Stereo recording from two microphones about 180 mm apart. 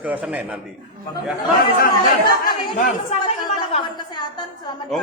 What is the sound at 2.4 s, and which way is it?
Speech, 50° left (ahead or behind).